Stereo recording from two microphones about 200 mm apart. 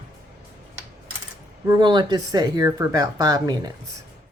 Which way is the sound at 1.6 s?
20° right (ahead or behind).